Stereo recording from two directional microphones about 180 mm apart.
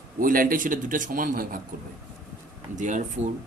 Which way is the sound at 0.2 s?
50° right (ahead or behind).